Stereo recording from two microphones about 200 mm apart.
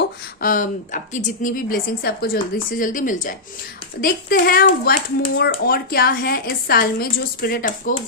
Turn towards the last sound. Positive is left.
turn(degrees=45)  # may be behind; listen again after turning